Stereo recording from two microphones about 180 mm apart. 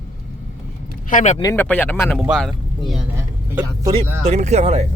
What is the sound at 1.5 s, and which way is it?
Speech, 10° left (ahead or behind).